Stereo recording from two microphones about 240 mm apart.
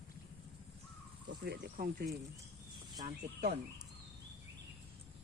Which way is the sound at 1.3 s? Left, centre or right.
Right.